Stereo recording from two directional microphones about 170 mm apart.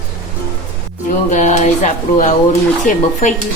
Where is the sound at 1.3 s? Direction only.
45° left (ahead or behind).